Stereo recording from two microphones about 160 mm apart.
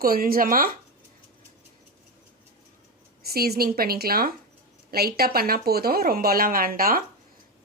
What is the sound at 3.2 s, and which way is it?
A woman's voice, 75° right (ahead or behind).